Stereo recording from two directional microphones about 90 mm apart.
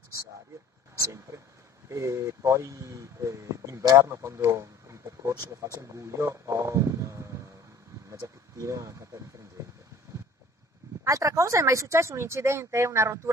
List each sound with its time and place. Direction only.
1.0 s speech: 35° right (ahead or behind)
11.1 s speech: 35° right (ahead or behind)